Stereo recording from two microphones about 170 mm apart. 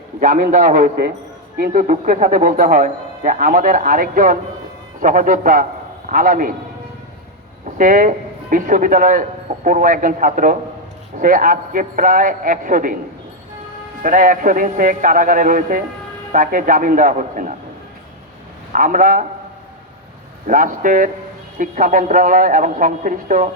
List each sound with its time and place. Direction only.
0.2 s speech: 50° right (ahead or behind)
7.8 s speech: 50° right (ahead or behind)
14.0 s speech: 55° right (ahead or behind)
18.7 s speech: 50° right (ahead or behind)
20.5 s speech: 50° right (ahead or behind)